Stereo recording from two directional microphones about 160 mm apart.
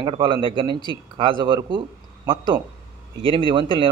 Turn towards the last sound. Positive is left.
turn(degrees=-30)  # may be behind; listen again after turning